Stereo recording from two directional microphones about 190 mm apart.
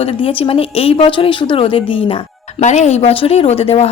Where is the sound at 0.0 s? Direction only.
30° left (ahead or behind).